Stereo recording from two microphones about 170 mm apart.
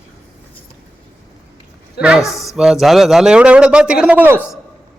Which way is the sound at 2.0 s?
5° right (ahead or behind).